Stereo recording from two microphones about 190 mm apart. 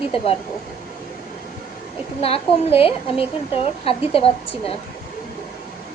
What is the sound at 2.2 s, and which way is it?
A woman's voice, 30° left (ahead or behind).